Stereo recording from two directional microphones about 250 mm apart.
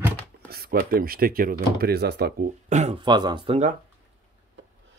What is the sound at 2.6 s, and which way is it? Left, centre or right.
Speech, right.